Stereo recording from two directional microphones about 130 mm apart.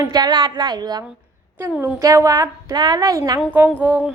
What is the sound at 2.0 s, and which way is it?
A woman's voice, 25° right (ahead or behind).